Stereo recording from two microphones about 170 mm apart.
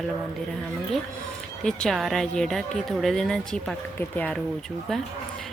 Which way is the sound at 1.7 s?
Centre (ahead or behind).